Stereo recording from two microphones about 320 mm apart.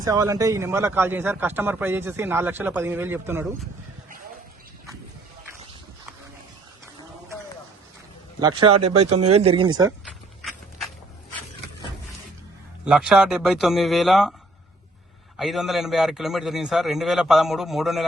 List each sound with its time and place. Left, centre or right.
0.0 s speech: centre
8.4 s speech: centre
8.8 s speech: right
9.3 s speech: centre
12.8 s a man's voice: centre
15.4 s a man's voice: centre